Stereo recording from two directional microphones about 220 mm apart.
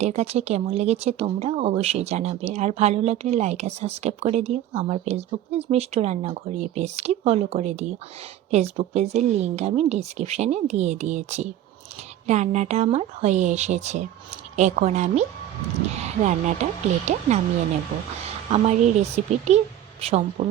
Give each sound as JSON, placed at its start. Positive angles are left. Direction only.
{"t": 0.0, "sound": "speech", "side_deg": -30}
{"t": 16.2, "sound": "speech", "side_deg": -35}
{"t": 18.5, "sound": "speech", "side_deg": -30}